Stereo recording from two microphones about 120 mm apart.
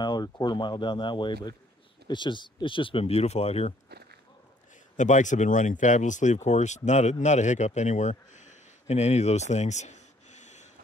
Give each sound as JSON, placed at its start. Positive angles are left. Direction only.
{"t": 0.0, "sound": "speech", "side_deg": 35}
{"t": 4.9, "sound": "speech", "side_deg": 90}
{"t": 9.5, "sound": "a sound", "side_deg": 75}